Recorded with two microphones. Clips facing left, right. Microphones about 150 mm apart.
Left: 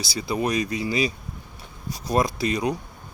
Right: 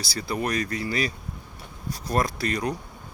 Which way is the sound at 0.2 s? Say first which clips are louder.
Left 3 dB; 15° left (ahead or behind).